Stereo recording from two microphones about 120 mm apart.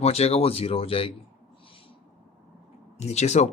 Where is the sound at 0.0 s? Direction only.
60° left (ahead or behind).